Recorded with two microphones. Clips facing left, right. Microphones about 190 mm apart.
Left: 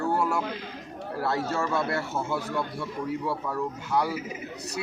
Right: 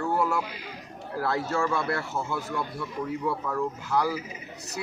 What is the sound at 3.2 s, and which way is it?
Speech, 5° left (ahead or behind).